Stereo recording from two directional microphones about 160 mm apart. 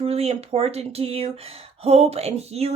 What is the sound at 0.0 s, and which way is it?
Speech, 40° right (ahead or behind).